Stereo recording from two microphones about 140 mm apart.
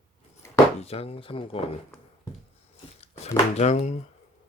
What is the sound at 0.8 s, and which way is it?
Speech, 45° left (ahead or behind).